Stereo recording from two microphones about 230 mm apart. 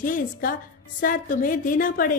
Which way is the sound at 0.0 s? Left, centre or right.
Left.